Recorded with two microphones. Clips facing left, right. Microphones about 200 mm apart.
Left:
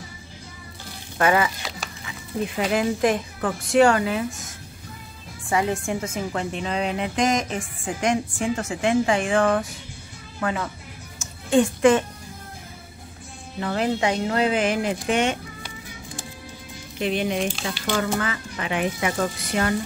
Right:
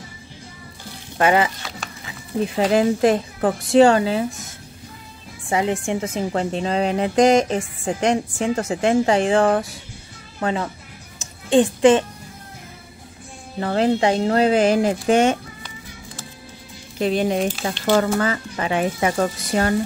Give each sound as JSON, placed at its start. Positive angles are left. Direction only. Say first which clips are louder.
{"t": 1.1, "sound": "speech", "louder": "right 3 dB", "side_deg": -25}
{"t": 2.5, "sound": "speech", "louder": "right 6 dB", "side_deg": -35}
{"t": 5.5, "sound": "a woman's voice", "louder": "right 2 dB", "side_deg": -20}
{"t": 6.0, "sound": "a woman's voice", "louder": "right 5 dB", "side_deg": -30}
{"t": 13.6, "sound": "speech", "louder": "right 5 dB", "side_deg": -40}
{"t": 17.0, "sound": "speech", "louder": "right 4 dB", "side_deg": -40}
{"t": 17.4, "sound": "speech", "louder": "right 4 dB", "side_deg": -5}
{"t": 17.8, "sound": "speech", "louder": "right 7 dB", "side_deg": -40}